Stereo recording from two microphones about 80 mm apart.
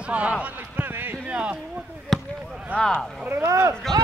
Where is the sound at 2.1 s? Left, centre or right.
Centre.